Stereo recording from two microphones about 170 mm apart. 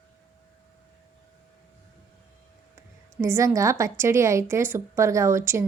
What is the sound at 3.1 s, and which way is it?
A woman's voice, 15° right (ahead or behind).